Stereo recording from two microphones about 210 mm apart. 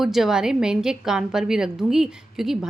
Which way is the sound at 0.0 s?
Centre (ahead or behind).